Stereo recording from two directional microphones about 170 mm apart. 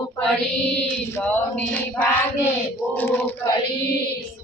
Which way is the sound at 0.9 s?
10° left (ahead or behind).